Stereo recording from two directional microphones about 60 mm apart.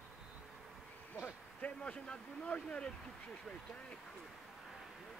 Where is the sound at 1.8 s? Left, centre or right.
Centre.